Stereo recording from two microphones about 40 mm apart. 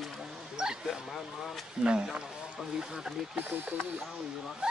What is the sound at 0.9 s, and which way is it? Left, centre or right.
Speech, centre.